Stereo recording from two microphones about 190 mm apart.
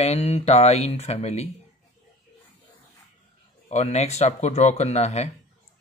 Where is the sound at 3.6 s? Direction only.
35° left (ahead or behind).